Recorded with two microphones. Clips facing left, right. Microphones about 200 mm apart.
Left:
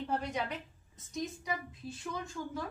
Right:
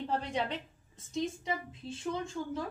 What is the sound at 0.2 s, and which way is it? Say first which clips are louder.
A woman's voice: right 2 dB; 30° right (ahead or behind).